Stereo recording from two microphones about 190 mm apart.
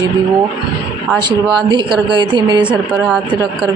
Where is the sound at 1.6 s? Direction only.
25° right (ahead or behind).